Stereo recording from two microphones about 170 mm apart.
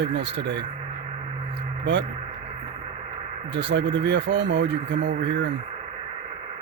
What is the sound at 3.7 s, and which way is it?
Speech, 90° right.